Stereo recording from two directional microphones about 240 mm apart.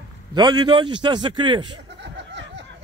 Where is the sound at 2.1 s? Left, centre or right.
Right.